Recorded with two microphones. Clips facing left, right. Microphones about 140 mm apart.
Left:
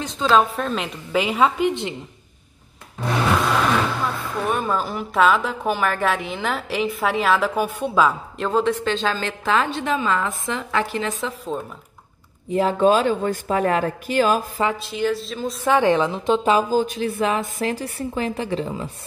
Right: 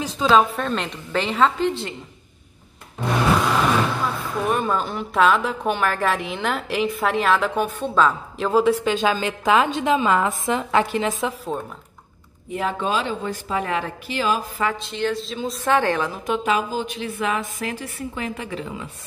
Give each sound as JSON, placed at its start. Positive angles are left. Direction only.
{"t": 0.0, "sound": "speech", "side_deg": -5}
{"t": 3.7, "sound": "speech", "side_deg": 0}
{"t": 8.4, "sound": "a woman's voice", "side_deg": -5}
{"t": 12.5, "sound": "speech", "side_deg": 40}
{"t": 14.8, "sound": "speech", "side_deg": 5}
{"t": 15.6, "sound": "a woman's voice", "side_deg": 15}